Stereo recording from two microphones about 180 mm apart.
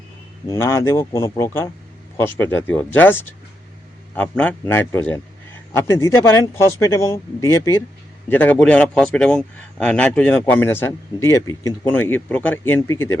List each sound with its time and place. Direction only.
0.4 s speech: 15° left (ahead or behind)